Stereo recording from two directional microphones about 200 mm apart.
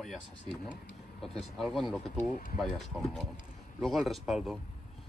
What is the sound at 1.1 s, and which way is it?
Speech, centre (ahead or behind).